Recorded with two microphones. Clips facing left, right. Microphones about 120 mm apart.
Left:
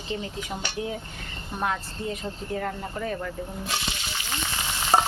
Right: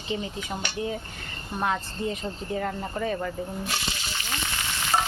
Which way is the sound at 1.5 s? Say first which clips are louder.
Right 1 dB; centre (ahead or behind).